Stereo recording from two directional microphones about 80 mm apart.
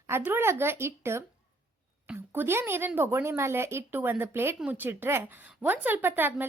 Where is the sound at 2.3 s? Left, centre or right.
Right.